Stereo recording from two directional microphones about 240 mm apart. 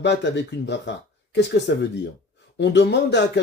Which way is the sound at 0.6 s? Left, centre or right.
Left.